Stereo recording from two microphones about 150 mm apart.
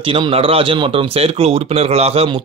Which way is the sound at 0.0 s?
35° right (ahead or behind).